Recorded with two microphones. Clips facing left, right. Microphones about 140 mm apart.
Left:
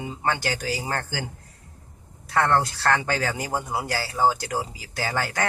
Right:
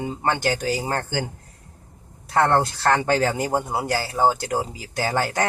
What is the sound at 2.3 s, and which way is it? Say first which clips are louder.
Speech: right 3 dB; 25° right (ahead or behind).